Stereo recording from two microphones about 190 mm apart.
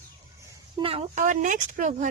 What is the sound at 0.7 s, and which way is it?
Speech, 30° right (ahead or behind).